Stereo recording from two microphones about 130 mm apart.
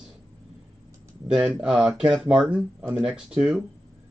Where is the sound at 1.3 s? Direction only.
5° right (ahead or behind).